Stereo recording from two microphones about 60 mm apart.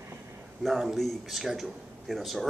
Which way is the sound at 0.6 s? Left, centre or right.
Centre.